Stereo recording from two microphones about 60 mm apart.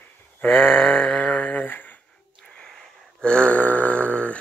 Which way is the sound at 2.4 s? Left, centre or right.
Centre.